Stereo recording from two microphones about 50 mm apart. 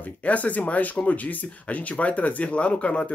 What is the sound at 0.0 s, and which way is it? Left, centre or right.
Speech, left.